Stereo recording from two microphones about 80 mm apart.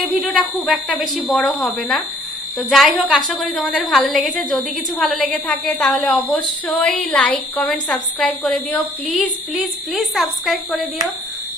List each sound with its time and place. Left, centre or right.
0.1 s a woman's voice: centre
8.5 s a woman's voice: centre
9.1 s a woman's voice: centre